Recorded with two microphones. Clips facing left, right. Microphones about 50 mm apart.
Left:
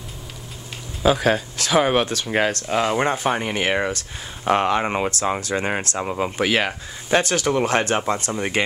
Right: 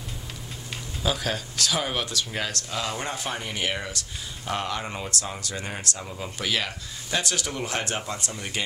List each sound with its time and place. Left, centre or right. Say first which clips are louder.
1.0 s speech: left 10 dB; left
5.4 s speech: left 10 dB; left
5.9 s speech: left 11 dB; left
6.3 s speech: left 5 dB; left